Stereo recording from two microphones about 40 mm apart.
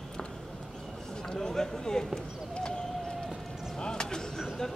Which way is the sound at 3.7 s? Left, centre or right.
Centre.